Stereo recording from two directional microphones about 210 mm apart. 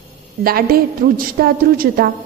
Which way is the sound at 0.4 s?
45° right (ahead or behind).